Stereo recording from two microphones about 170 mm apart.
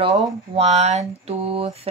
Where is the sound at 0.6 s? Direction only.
40° right (ahead or behind).